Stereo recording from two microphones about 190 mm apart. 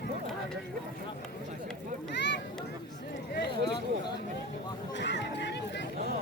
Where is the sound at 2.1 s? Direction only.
65° left (ahead or behind).